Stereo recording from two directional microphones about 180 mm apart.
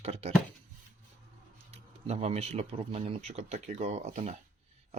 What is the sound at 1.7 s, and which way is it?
Speech, 35° right (ahead or behind).